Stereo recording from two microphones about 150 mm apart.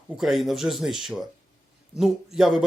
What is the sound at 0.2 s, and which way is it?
A man's voice, centre (ahead or behind).